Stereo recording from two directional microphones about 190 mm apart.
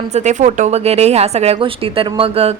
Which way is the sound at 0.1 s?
35° right (ahead or behind).